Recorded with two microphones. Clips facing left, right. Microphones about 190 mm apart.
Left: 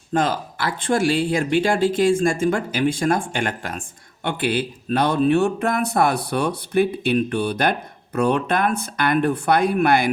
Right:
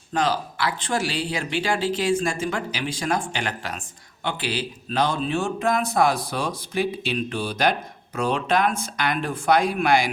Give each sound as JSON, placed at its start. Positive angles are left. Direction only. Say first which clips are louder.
{"t": 0.1, "sound": "speech", "louder": "left 2 dB", "side_deg": 50}